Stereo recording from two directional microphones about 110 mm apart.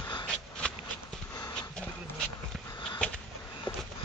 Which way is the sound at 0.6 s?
10° left (ahead or behind).